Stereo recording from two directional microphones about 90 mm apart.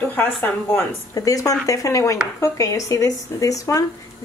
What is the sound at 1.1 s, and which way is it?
Speech, 40° left (ahead or behind).